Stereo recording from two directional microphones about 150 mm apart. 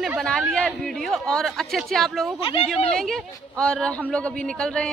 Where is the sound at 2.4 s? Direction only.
40° left (ahead or behind).